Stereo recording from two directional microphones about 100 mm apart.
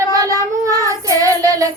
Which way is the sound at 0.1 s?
35° right (ahead or behind).